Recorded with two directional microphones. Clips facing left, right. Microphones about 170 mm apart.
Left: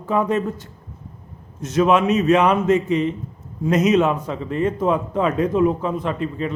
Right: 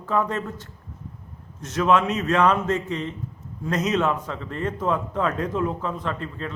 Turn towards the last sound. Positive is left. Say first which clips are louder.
# left 6 dB
turn(degrees=15)  # may be behind; listen again after turning